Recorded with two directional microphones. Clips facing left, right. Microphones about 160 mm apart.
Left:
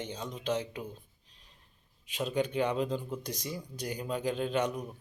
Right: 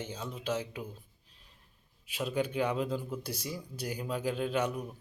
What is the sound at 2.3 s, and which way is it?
Speech, 5° right (ahead or behind).